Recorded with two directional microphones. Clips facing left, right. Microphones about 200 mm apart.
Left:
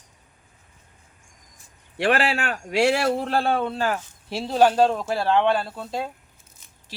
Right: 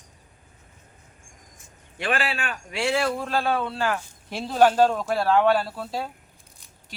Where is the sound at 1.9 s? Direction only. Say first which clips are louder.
Left 5 dB; 70° left (ahead or behind).